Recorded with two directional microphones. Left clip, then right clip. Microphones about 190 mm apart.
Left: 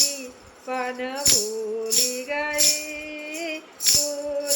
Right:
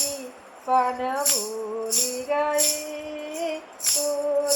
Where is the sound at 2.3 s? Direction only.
15° left (ahead or behind).